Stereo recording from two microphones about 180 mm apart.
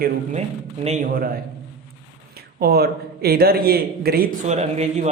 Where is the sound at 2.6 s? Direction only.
60° right (ahead or behind).